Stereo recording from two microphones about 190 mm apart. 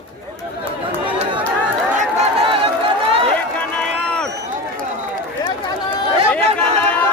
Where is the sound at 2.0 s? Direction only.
35° right (ahead or behind).